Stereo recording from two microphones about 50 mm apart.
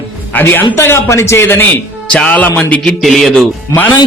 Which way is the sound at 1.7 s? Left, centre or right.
Left.